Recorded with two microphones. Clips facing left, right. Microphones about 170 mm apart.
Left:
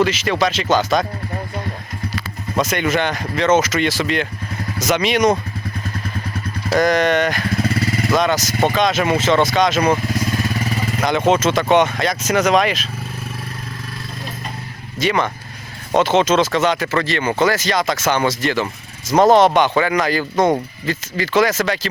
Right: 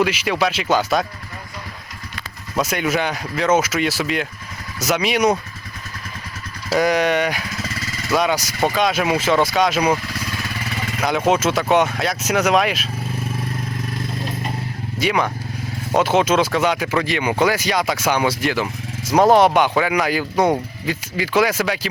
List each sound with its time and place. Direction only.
0.0 s speech: 5° right (ahead or behind)
2.6 s speech: 5° right (ahead or behind)
6.7 s speech: 5° right (ahead or behind)
7.7 s vehicle: 30° left (ahead or behind)
8.1 s speech: 5° right (ahead or behind)
10.1 s vehicle: 45° left (ahead or behind)
11.0 s speech: 5° right (ahead or behind)
14.9 s speech: 5° right (ahead or behind)